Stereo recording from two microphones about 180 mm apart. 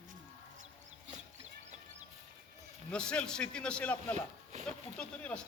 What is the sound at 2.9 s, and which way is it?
A man's voice, 5° left (ahead or behind).